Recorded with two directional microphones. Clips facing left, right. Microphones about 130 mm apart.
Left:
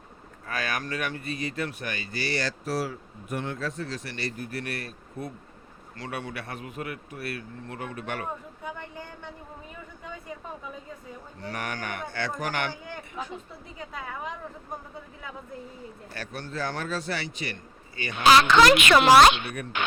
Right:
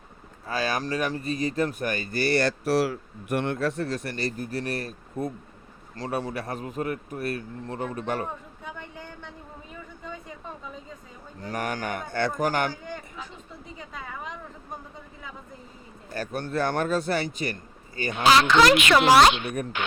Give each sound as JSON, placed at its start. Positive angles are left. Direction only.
{"t": 0.4, "sound": "a man's voice", "side_deg": -30}
{"t": 8.6, "sound": "speech", "side_deg": 10}
{"t": 11.3, "sound": "a man's voice", "side_deg": -45}
{"t": 13.9, "sound": "speech", "side_deg": 5}
{"t": 16.1, "sound": "a man's voice", "side_deg": -50}
{"t": 18.3, "sound": "a child's voice", "side_deg": 55}